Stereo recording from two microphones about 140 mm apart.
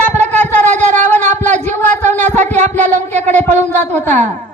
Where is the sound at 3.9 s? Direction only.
15° left (ahead or behind).